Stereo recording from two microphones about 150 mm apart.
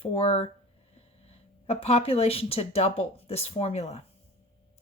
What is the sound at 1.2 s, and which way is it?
Speech, 45° left (ahead or behind).